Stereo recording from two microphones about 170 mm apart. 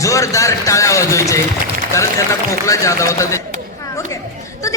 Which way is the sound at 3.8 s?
20° left (ahead or behind).